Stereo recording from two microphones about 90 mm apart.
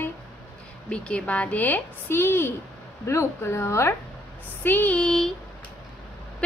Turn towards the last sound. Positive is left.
turn(degrees=5)  # may be behind; listen again after turning